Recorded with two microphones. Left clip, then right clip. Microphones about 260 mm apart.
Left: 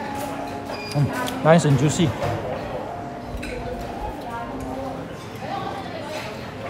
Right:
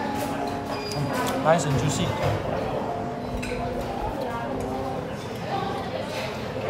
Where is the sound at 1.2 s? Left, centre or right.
Left.